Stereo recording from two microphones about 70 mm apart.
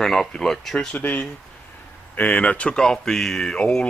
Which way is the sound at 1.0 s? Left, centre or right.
Left.